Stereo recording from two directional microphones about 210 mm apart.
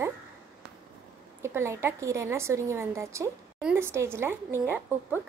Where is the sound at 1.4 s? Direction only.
10° right (ahead or behind).